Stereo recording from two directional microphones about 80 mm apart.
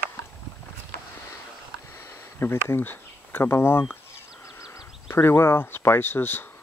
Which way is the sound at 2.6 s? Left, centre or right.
Left.